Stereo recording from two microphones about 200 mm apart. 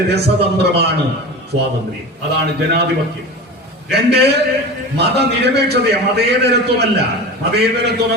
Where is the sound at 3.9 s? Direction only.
55° right (ahead or behind).